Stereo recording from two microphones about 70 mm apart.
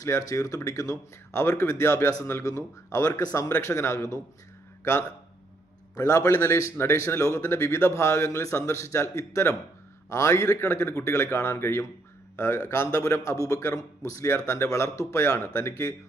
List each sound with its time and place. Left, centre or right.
0.0 s speech: left
4.8 s a man's voice: left
6.0 s speech: left
7.4 s a man's voice: left